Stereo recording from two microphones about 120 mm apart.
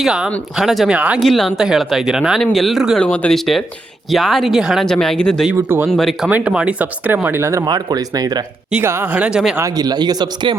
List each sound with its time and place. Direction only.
0.0 s speech: 5° right (ahead or behind)
1.2 s speech: centre (ahead or behind)
3.0 s speech: 10° left (ahead or behind)
5.5 s speech: 20° right (ahead or behind)
5.9 s speech: centre (ahead or behind)
6.3 s speech: 10° right (ahead or behind)
7.6 s speech: 35° right (ahead or behind)
8.7 s speech: 20° right (ahead or behind)
9.2 s speech: 5° right (ahead or behind)
9.6 s speech: 30° right (ahead or behind)